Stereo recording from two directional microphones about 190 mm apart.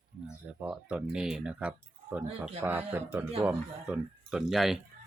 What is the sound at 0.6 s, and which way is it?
Speech, 5° right (ahead or behind).